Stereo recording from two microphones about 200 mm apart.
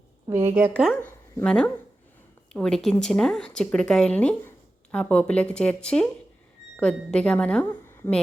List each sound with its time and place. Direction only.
0.3 s a woman's voice: 10° right (ahead or behind)
1.4 s a woman's voice: 5° left (ahead or behind)